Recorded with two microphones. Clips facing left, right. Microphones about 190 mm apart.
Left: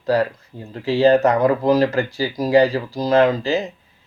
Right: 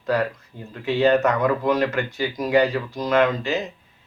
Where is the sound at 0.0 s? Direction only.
35° left (ahead or behind).